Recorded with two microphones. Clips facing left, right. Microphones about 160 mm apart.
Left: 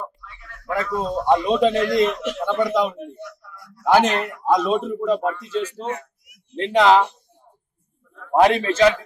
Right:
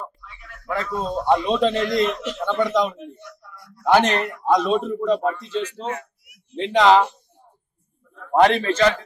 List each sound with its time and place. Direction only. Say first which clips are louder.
0.2 s a sound: left 1 dB; 15° right (ahead or behind)
0.7 s a man's voice: left 2 dB; 10° left (ahead or behind)
8.3 s a man's voice: even; 5° left (ahead or behind)